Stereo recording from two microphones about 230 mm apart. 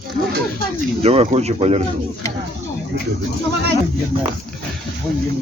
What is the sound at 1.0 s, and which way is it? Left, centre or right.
Speech, right.